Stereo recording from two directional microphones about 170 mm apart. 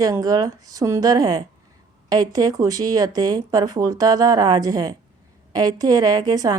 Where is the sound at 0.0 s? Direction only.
20° right (ahead or behind).